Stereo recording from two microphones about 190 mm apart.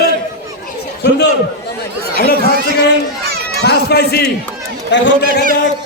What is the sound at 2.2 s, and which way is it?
Speech, 55° left (ahead or behind).